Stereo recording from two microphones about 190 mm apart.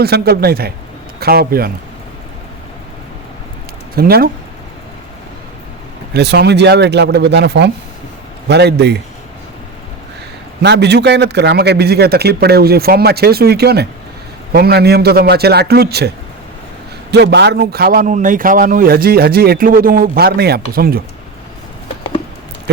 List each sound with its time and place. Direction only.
0.0 s a man's voice: 55° right (ahead or behind)
3.9 s a man's voice: 50° right (ahead or behind)
6.1 s a man's voice: 60° right (ahead or behind)
10.6 s a man's voice: 60° right (ahead or behind)